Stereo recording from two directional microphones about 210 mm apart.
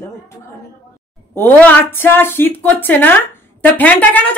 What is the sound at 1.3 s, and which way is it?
Speech, 10° left (ahead or behind).